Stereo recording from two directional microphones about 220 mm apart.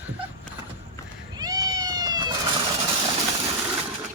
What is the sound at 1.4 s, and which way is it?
Cat, 15° right (ahead or behind).